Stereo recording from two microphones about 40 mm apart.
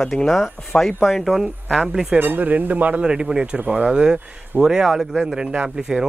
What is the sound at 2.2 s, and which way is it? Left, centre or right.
Speech, right.